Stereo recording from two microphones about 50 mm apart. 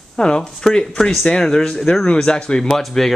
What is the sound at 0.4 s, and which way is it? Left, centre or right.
Speech, centre.